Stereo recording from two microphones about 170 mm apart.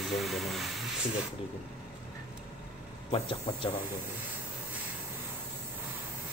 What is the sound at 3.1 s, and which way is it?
Speech, 30° left (ahead or behind).